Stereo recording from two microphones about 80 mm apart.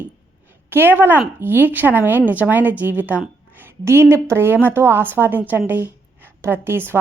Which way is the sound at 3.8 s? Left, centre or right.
Right.